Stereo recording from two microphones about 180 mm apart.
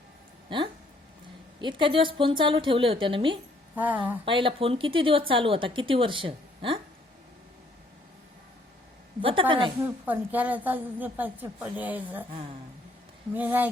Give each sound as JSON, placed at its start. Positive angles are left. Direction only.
{"t": 0.5, "sound": "speech", "side_deg": -25}
{"t": 3.8, "sound": "a woman's voice", "side_deg": -10}
{"t": 4.3, "sound": "speech", "side_deg": -30}
{"t": 9.2, "sound": "speech", "side_deg": -30}
{"t": 10.1, "sound": "a woman's voice", "side_deg": -10}
{"t": 13.3, "sound": "a woman's voice", "side_deg": -10}